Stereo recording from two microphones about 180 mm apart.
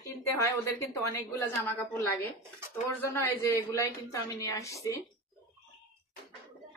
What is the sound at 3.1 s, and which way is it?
A woman's voice, 15° left (ahead or behind).